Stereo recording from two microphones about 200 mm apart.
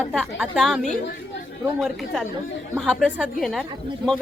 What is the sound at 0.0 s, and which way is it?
Speech, centre (ahead or behind).